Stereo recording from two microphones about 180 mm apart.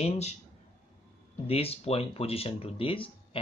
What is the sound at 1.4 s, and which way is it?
Speech, 35° left (ahead or behind).